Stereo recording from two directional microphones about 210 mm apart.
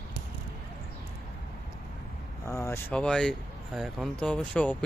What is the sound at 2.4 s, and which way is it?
Speech, 15° left (ahead or behind).